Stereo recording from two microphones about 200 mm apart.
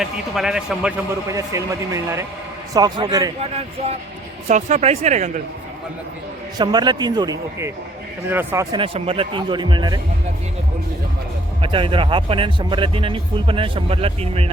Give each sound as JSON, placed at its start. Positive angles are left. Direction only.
{"t": 0.0, "sound": "a man's voice", "side_deg": -5}
{"t": 1.3, "sound": "speech", "side_deg": -15}
{"t": 4.4, "sound": "speech", "side_deg": -35}
{"t": 6.6, "sound": "speech", "side_deg": -20}
{"t": 8.7, "sound": "speech", "side_deg": -25}
{"t": 11.6, "sound": "speech", "side_deg": -25}